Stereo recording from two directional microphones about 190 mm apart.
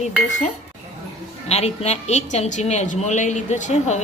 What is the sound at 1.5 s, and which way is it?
A woman's voice, 35° left (ahead or behind).